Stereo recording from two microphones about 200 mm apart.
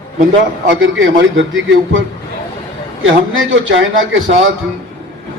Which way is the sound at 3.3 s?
75° right (ahead or behind).